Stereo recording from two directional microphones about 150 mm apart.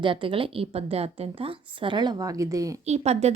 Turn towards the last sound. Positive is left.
turn(degrees=-45)  # may be behind; listen again after turning